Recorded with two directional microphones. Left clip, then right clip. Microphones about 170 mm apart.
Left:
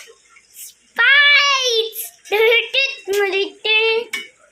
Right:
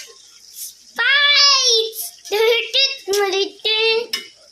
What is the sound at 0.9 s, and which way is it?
Child singing, 10° left (ahead or behind).